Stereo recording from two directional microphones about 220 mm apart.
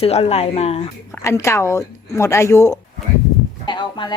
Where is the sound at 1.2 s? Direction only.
15° left (ahead or behind).